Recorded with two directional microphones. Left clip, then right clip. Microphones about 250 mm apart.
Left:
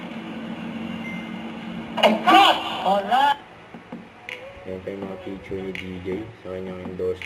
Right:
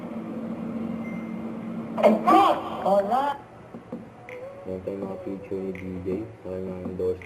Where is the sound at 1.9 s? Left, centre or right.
Centre.